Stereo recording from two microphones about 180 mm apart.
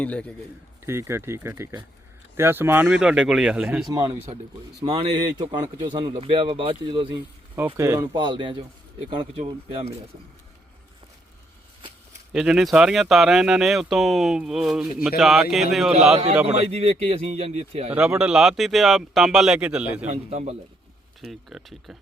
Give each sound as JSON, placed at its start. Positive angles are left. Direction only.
{"t": 0.0, "sound": "a man's voice", "side_deg": 5}
{"t": 0.9, "sound": "speech", "side_deg": -15}
{"t": 3.9, "sound": "a man's voice", "side_deg": -20}
{"t": 12.3, "sound": "speech", "side_deg": 0}
{"t": 16.5, "sound": "a man's voice", "side_deg": -35}
{"t": 17.9, "sound": "speech", "side_deg": -5}
{"t": 20.1, "sound": "a man's voice", "side_deg": -40}
{"t": 21.2, "sound": "speech", "side_deg": 0}